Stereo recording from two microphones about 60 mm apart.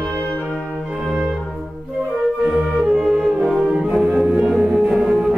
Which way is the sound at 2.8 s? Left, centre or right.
Centre.